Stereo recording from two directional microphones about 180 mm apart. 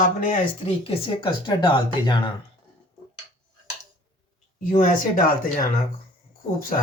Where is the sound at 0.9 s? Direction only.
30° left (ahead or behind).